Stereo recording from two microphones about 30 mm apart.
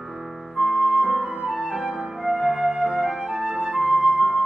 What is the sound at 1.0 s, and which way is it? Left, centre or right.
Music, centre.